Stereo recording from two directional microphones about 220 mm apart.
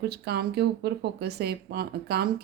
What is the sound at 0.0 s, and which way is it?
Speech, 50° right (ahead or behind).